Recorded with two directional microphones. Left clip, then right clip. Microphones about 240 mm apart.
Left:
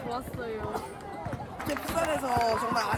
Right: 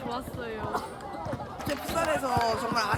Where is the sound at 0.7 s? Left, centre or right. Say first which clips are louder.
Right 2 dB; right.